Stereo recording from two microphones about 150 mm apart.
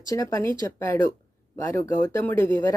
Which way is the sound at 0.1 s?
20° left (ahead or behind).